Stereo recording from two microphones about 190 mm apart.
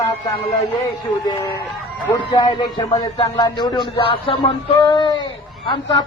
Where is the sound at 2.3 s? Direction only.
20° left (ahead or behind).